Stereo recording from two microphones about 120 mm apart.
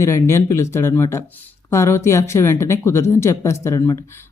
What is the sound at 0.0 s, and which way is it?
Speech, 25° left (ahead or behind).